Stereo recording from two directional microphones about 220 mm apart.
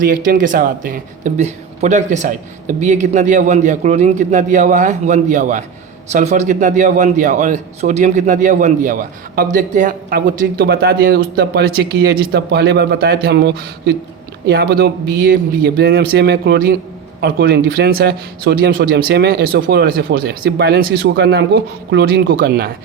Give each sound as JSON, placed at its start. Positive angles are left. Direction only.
{"t": 0.0, "sound": "a man's voice", "side_deg": -40}